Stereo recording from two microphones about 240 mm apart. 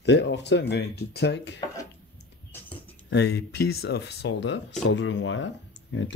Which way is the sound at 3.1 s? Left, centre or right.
Left.